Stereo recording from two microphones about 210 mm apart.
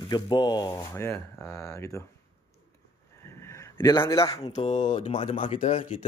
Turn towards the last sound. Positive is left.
turn(degrees=35)  # may be behind; listen again after turning